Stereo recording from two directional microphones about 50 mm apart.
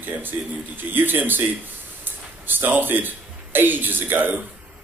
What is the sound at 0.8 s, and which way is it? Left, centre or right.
A man's voice, right.